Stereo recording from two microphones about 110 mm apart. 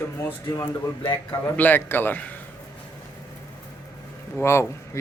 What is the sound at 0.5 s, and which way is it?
Speech, 35° left (ahead or behind).